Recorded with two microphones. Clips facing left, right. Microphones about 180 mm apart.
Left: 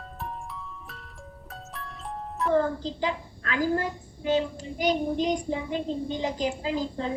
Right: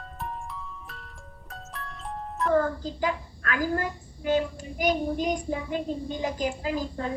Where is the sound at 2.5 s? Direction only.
20° left (ahead or behind).